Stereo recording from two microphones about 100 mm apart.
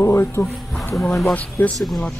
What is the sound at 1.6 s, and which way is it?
Speech, 20° left (ahead or behind).